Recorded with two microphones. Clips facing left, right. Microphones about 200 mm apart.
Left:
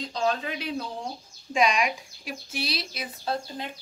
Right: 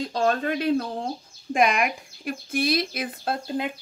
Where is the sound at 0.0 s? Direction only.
55° right (ahead or behind).